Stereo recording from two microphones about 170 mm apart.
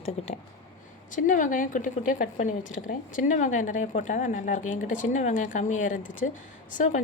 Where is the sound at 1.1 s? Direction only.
50° left (ahead or behind).